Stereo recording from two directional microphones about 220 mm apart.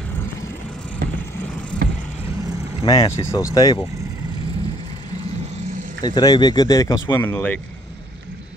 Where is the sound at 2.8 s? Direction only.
15° left (ahead or behind).